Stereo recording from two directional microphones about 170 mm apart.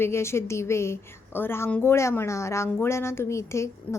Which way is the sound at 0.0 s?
15° left (ahead or behind).